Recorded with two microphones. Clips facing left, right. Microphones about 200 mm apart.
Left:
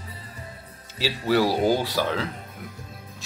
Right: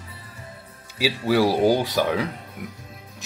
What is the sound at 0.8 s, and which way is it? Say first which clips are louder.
Speech: right 3 dB; 10° right (ahead or behind).